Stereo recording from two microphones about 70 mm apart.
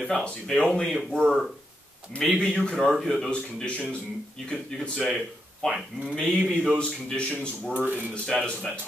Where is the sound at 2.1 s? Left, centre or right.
Centre.